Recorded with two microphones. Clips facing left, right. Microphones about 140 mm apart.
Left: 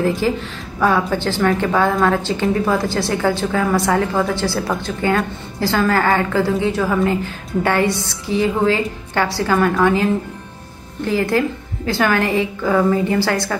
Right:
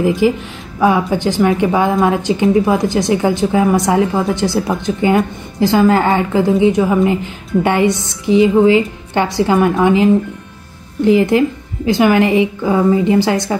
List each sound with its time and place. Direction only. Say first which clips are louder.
0.0 s speech: right 5 dB; 15° right (ahead or behind)
11.1 s a woman's voice: right 6 dB; 20° right (ahead or behind)